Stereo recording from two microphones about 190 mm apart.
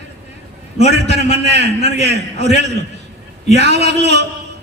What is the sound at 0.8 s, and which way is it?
Speech, 65° right (ahead or behind).